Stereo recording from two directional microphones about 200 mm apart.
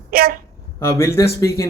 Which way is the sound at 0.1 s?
50° right (ahead or behind).